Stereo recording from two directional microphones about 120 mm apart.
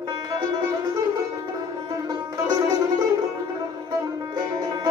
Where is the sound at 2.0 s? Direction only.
35° right (ahead or behind).